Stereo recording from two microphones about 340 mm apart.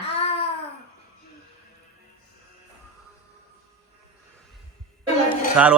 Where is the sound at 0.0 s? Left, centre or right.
Centre.